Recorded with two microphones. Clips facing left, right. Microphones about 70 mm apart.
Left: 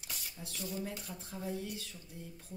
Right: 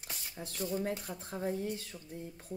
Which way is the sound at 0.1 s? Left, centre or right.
Right.